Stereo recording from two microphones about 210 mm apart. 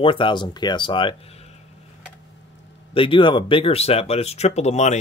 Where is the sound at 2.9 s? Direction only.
25° left (ahead or behind).